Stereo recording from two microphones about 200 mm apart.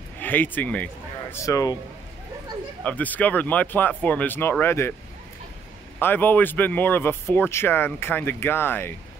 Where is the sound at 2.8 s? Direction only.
5° left (ahead or behind).